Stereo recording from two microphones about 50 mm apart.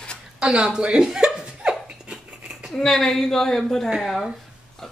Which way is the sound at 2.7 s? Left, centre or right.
Centre.